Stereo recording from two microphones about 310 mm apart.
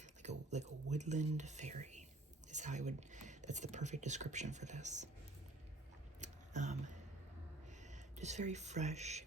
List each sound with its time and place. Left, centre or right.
0.0 s speech: right
6.1 s a sound: right
7.7 s speech: right